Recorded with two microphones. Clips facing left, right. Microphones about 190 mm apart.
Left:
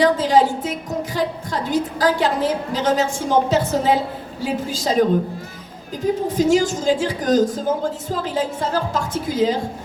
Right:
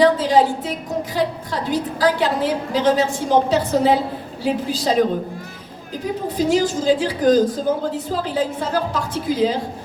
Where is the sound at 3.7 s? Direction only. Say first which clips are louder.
Right 2 dB; 40° right (ahead or behind).